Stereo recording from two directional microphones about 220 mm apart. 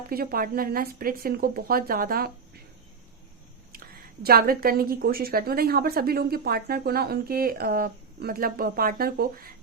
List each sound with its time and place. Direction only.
0.1 s a woman's voice: 45° right (ahead or behind)
3.7 s a woman's voice: 45° right (ahead or behind)